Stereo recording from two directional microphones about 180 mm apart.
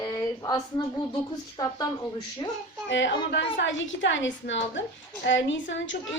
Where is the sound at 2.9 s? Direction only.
85° left.